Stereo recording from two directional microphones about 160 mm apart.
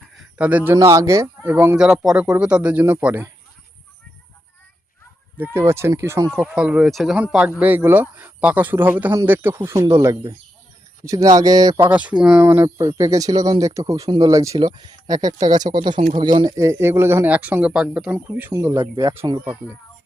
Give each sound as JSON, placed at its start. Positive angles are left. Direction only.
{"t": 0.2, "sound": "speech", "side_deg": -10}
{"t": 5.4, "sound": "speech", "side_deg": -15}
{"t": 11.9, "sound": "speech", "side_deg": -10}
{"t": 18.8, "sound": "speech", "side_deg": -25}
{"t": 19.1, "sound": "speech", "side_deg": -15}